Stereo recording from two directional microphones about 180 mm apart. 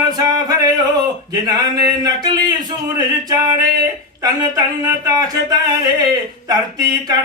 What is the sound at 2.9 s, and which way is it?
Speech, 20° right (ahead or behind).